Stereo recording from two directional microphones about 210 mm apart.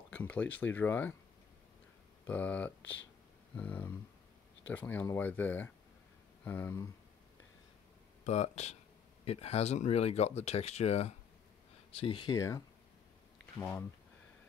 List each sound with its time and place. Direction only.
0.1 s speech: 5° left (ahead or behind)
2.2 s speech: 5° left (ahead or behind)
2.8 s speech: 60° left (ahead or behind)
3.5 s speech: 10° left (ahead or behind)
8.2 s speech: 30° left (ahead or behind); by 13.8 s 10° left (ahead or behind)